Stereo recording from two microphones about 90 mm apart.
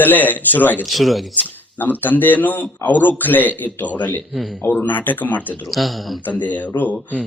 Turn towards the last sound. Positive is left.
turn(degrees=15)  # may be behind; listen again after turning